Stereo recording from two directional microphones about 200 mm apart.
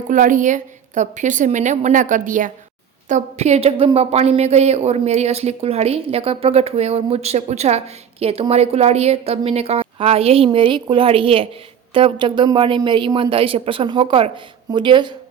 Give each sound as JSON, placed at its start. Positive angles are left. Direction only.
{"t": 0.1, "sound": "a woman's voice", "side_deg": -40}